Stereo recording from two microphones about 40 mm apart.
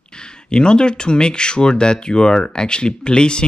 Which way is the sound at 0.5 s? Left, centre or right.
Left.